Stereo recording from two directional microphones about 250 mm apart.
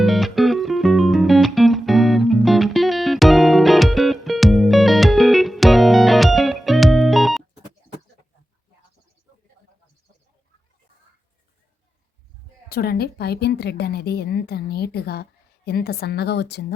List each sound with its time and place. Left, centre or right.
0.0 s music: centre
12.6 s a woman's voice: left